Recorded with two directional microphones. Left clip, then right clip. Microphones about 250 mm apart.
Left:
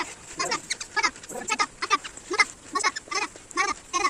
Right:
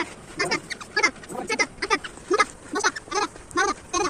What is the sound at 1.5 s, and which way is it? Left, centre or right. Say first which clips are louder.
Goat: right 1 dB; centre.